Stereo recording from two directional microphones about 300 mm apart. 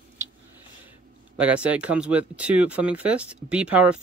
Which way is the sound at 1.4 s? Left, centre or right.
Centre.